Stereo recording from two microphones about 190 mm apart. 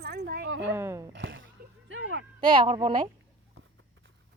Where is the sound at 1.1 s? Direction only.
75° right (ahead or behind).